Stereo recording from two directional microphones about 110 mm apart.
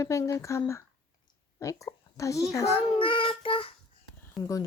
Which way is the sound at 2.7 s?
55° left (ahead or behind).